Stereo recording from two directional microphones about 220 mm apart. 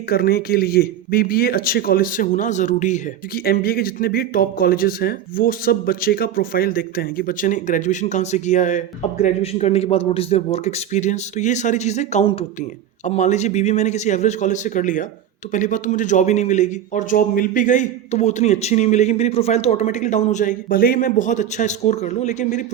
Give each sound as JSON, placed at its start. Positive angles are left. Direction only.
{"t": 0.1, "sound": "speech", "side_deg": 45}